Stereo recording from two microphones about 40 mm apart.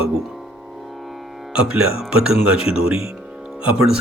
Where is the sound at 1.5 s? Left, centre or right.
Right.